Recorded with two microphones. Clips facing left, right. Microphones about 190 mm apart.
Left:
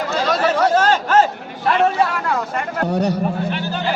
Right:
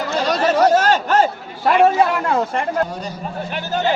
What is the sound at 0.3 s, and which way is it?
Chatter, 40° right (ahead or behind).